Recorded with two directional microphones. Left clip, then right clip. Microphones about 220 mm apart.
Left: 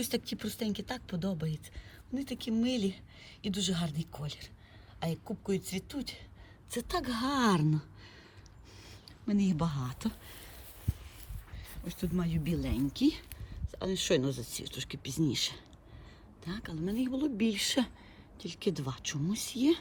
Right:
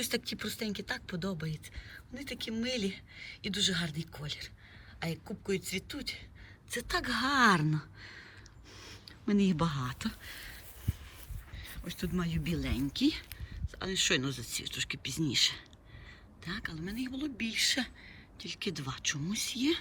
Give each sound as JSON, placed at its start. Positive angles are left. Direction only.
{"t": 0.3, "sound": "speech", "side_deg": 5}
{"t": 11.6, "sound": "speech", "side_deg": 5}
{"t": 17.3, "sound": "a woman's voice", "side_deg": 20}